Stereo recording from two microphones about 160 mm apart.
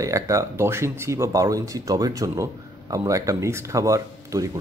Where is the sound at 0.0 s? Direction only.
20° right (ahead or behind).